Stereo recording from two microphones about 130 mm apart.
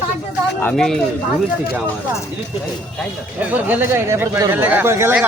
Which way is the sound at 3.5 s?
15° right (ahead or behind).